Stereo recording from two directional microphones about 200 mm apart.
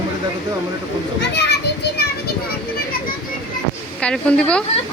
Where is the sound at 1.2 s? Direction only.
55° left (ahead or behind).